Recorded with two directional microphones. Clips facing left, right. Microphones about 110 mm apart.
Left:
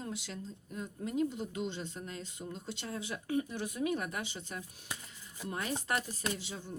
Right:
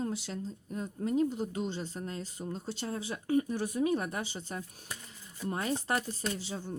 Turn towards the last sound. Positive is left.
turn(degrees=-35)  # may be behind; listen again after turning